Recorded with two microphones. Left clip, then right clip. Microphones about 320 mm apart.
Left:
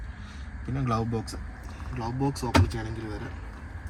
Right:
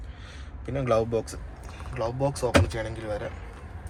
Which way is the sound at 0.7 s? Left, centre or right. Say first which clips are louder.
Right 6 dB; centre.